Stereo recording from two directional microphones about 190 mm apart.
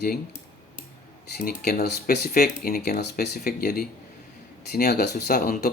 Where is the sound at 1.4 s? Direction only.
55° left (ahead or behind).